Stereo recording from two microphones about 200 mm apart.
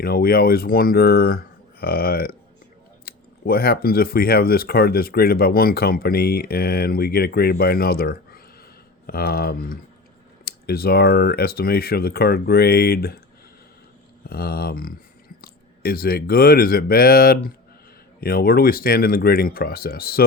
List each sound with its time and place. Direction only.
0.0 s speech: 50° left (ahead or behind)
14.3 s speech: 50° left (ahead or behind)